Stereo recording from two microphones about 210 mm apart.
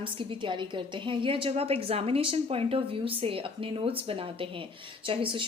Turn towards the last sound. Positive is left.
turn(degrees=-25)  # may be behind; listen again after turning